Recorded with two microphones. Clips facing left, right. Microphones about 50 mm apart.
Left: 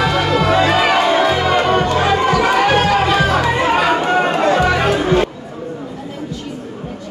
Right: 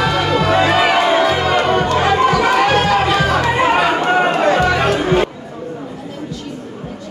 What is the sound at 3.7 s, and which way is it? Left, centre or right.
Run, centre.